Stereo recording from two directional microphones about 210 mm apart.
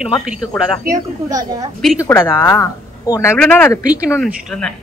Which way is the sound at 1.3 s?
15° right (ahead or behind).